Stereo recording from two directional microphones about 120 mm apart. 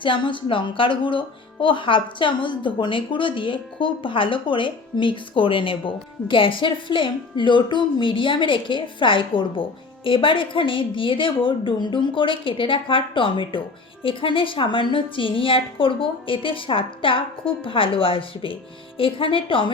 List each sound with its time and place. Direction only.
0.0 s a woman's voice: 45° left (ahead or behind)